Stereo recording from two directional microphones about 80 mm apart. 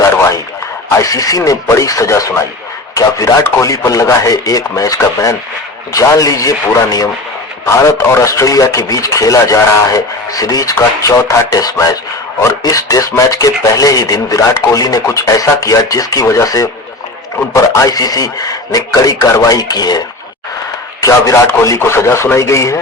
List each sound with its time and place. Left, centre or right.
0.9 s speech: left
8.1 s speech: left
21.0 s speech: left
21.8 s speech: left